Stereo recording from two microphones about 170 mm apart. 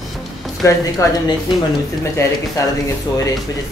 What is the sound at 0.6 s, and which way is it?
Speech, 20° left (ahead or behind).